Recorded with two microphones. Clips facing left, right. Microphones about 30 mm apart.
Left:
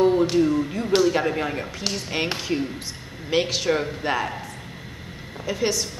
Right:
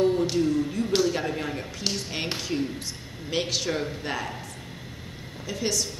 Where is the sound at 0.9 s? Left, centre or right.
Centre.